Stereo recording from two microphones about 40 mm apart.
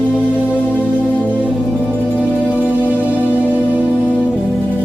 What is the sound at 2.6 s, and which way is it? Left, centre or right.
Music, right.